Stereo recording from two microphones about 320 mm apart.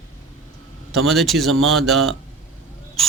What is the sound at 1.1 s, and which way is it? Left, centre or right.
Speech, centre.